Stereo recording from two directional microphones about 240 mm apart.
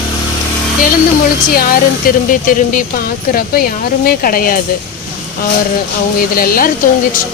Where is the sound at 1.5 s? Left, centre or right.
Left.